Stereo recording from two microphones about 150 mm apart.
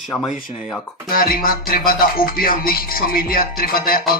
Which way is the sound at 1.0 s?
75° left (ahead or behind).